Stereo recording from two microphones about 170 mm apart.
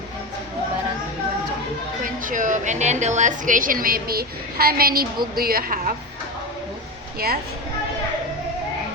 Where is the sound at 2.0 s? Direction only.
50° right (ahead or behind).